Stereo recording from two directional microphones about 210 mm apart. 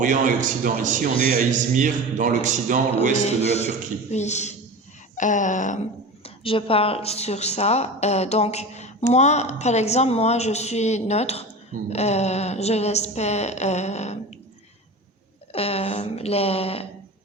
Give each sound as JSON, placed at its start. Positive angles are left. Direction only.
{"t": 0.0, "sound": "a man's voice", "side_deg": -40}
{"t": 3.2, "sound": "speech", "side_deg": 30}
{"t": 6.2, "sound": "speech", "side_deg": 25}
{"t": 15.5, "sound": "a woman's voice", "side_deg": 30}